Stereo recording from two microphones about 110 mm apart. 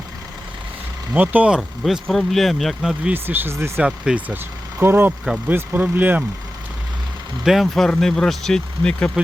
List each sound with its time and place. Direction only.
1.1 s speech: 15° right (ahead or behind)
3.1 s speech: 20° right (ahead or behind)
3.8 s speech: 10° right (ahead or behind)
4.8 s speech: 20° right (ahead or behind)
7.4 s speech: centre (ahead or behind)